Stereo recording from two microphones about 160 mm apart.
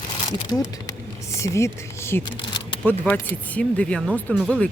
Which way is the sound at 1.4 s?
20° left (ahead or behind).